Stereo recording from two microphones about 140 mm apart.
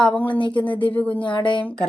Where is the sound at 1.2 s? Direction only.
35° left (ahead or behind).